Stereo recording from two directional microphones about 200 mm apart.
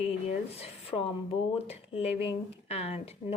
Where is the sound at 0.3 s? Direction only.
30° left (ahead or behind).